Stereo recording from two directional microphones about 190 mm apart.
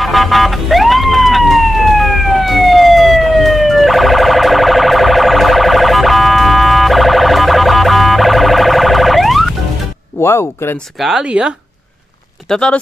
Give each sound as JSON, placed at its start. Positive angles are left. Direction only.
{"t": 0.0, "sound": "police car", "side_deg": 0}
{"t": 10.2, "sound": "speech", "side_deg": 15}
{"t": 11.0, "sound": "speech", "side_deg": -5}